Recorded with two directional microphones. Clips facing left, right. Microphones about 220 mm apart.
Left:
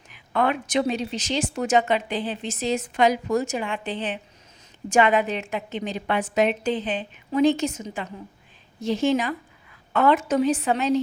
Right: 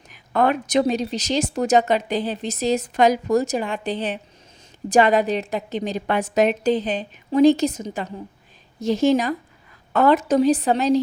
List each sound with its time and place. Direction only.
0.1 s speech: 40° right (ahead or behind)